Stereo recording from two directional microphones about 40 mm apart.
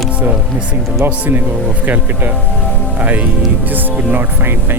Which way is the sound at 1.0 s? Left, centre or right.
Right.